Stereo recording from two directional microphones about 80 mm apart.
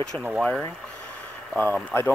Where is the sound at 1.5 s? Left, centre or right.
Centre.